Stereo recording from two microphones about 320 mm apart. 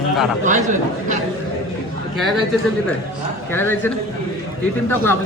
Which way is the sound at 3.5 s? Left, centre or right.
Centre.